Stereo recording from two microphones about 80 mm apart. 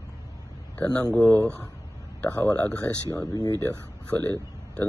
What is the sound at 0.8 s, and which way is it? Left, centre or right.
A man's voice, centre.